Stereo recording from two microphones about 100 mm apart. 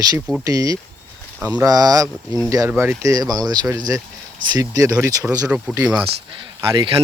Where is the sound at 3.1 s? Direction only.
40° right (ahead or behind).